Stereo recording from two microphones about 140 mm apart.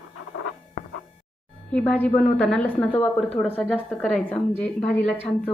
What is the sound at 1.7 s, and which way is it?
A woman's voice, 10° left (ahead or behind).